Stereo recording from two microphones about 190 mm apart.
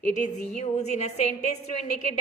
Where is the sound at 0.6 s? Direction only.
35° left (ahead or behind).